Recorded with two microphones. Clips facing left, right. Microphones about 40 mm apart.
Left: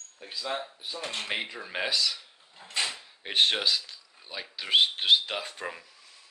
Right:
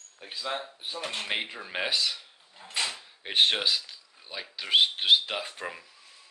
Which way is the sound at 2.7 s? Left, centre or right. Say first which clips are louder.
Even; centre.